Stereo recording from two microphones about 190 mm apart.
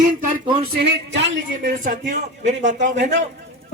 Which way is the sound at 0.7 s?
70° right (ahead or behind).